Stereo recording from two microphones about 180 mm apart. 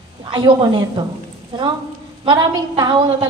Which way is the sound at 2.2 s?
25° right (ahead or behind).